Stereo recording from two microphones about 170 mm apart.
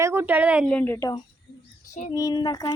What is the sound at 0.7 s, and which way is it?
Speech, 10° left (ahead or behind).